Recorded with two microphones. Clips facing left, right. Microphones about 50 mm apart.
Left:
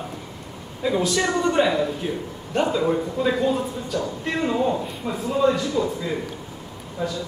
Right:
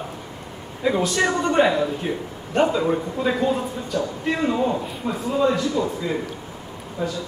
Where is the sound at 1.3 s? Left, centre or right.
Centre.